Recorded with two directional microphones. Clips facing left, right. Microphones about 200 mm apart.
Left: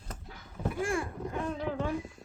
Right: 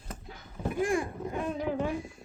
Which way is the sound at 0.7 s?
20° right (ahead or behind).